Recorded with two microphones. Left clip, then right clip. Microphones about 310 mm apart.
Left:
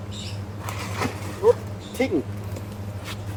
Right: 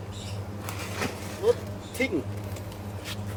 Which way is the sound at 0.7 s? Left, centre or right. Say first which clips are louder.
Left 4 dB; left.